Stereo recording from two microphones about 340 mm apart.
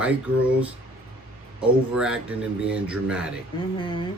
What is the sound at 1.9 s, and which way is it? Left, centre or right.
Speech, centre.